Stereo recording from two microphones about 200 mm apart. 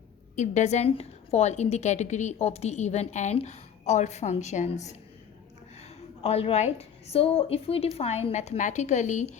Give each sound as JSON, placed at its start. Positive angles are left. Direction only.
{"t": 0.3, "sound": "a woman's voice", "side_deg": 35}